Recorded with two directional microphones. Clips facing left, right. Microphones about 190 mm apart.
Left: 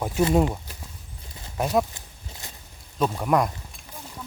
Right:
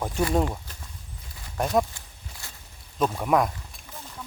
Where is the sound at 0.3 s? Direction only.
10° left (ahead or behind).